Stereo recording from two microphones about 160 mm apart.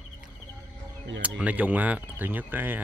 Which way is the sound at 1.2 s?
10° right (ahead or behind).